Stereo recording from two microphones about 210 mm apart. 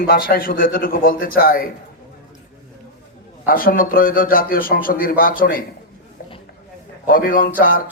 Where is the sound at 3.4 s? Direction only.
45° left (ahead or behind).